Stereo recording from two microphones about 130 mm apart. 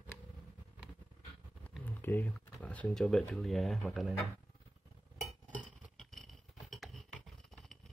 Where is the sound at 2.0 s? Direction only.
15° left (ahead or behind).